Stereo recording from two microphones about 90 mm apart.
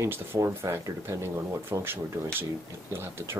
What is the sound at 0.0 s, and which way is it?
Speech, 30° right (ahead or behind).